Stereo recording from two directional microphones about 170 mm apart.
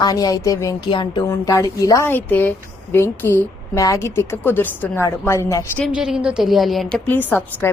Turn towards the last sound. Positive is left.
turn(degrees=10)  # may be behind; listen again after turning